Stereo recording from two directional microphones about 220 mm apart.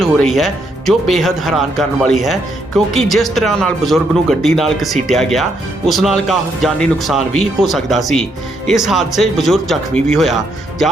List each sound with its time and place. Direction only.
0.0 s speech: centre (ahead or behind)